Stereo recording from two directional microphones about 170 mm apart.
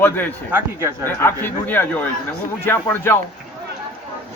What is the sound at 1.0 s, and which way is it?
A man's voice, 10° left (ahead or behind).